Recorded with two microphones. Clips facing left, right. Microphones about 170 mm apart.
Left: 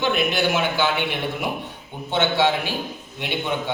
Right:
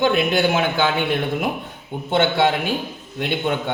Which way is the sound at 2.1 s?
55° right (ahead or behind).